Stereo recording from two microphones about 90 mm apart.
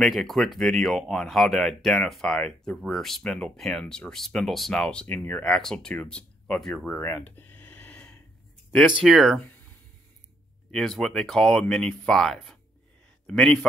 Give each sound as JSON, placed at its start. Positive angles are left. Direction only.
{"t": 0.0, "sound": "speech", "side_deg": 0}
{"t": 4.1, "sound": "speech", "side_deg": 5}
{"t": 5.0, "sound": "speech", "side_deg": 20}
{"t": 5.5, "sound": "speech", "side_deg": 5}
{"t": 7.0, "sound": "a sound", "side_deg": 25}
{"t": 8.8, "sound": "speech", "side_deg": -5}
{"t": 10.7, "sound": "speech", "side_deg": 5}